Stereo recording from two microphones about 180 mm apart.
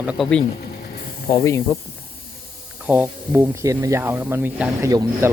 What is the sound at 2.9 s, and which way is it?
Speech, 10° right (ahead or behind).